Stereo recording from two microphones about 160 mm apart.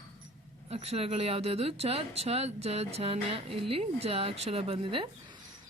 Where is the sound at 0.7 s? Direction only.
40° right (ahead or behind).